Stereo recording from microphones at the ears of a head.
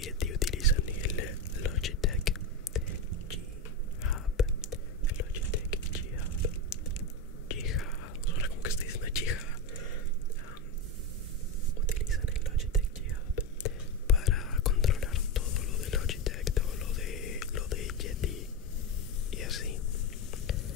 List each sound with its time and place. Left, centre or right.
0.0 s whispering: left
4.0 s whispering: left
7.4 s whispering: left
13.4 s whispering: left